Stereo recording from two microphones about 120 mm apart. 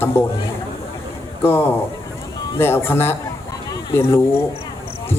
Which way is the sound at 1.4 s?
20° left (ahead or behind).